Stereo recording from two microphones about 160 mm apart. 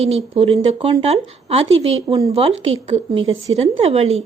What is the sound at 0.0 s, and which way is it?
Speech, 40° right (ahead or behind).